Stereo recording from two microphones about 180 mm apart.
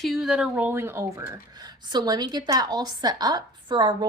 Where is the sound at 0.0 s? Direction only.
Centre (ahead or behind).